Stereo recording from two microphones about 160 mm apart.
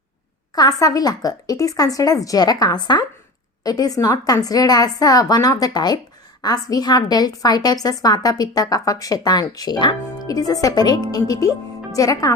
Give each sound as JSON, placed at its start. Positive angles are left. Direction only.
{"t": 0.5, "sound": "a woman's voice", "side_deg": 25}